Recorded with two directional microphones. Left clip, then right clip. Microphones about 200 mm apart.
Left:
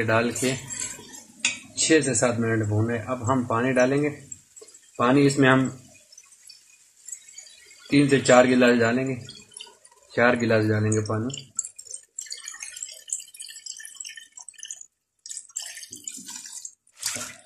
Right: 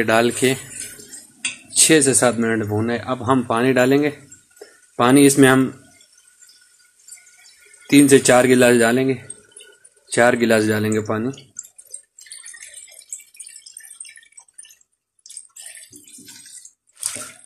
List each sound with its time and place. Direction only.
0.0 s speech: 50° right (ahead or behind)
1.9 s speech: 55° right (ahead or behind)
7.8 s speech: 50° right (ahead or behind)
10.1 s speech: 50° right (ahead or behind)